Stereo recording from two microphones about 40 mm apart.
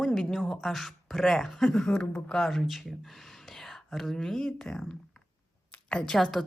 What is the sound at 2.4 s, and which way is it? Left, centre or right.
Speech, centre.